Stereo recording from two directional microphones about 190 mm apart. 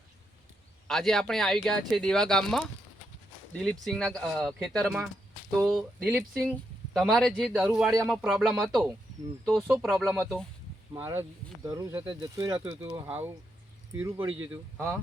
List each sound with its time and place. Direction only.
0.9 s speech: centre (ahead or behind)
10.9 s speech: 15° right (ahead or behind)